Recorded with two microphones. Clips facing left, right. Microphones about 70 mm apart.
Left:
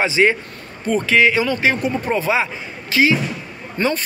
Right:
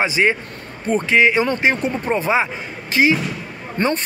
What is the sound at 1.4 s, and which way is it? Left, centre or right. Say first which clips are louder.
A man's voice: even; right.